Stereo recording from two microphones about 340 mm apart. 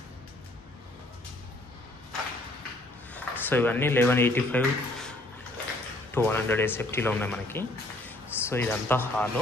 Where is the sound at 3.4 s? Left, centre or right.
Centre.